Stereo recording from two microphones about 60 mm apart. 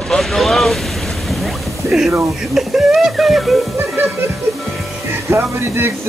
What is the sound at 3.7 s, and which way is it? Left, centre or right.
Music, right.